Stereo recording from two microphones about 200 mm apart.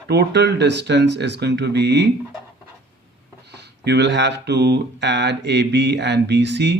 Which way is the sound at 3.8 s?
60° right (ahead or behind).